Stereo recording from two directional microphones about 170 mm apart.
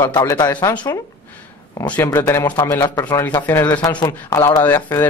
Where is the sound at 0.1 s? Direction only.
20° left (ahead or behind).